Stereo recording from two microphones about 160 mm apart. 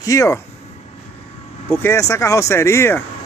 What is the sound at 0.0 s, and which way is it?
Speech, 20° left (ahead or behind).